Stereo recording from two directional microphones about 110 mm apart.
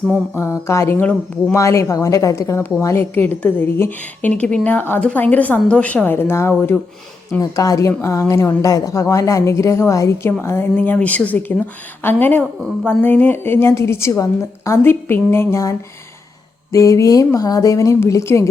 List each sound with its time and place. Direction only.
0.3 s a woman's voice: 25° left (ahead or behind)
16.7 s a woman's voice: 30° left (ahead or behind)